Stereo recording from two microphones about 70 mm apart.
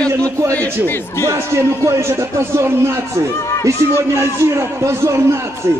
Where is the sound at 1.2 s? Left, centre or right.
Right.